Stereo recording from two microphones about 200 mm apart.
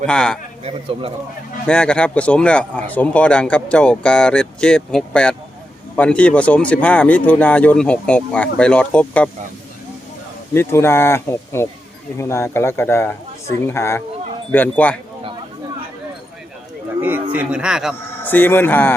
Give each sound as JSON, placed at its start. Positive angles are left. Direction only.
{"t": 0.0, "sound": "speech", "side_deg": 5}
{"t": 0.6, "sound": "a man's voice", "side_deg": -30}
{"t": 1.6, "sound": "speech", "side_deg": 5}
{"t": 10.5, "sound": "speech", "side_deg": 10}
{"t": 17.0, "sound": "speech", "side_deg": -10}
{"t": 18.2, "sound": "speech", "side_deg": 10}